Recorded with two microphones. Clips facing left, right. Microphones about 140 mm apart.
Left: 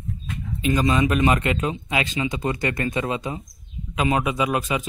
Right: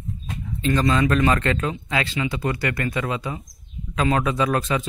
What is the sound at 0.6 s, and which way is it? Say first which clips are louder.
A man's voice: even; 15° left (ahead or behind).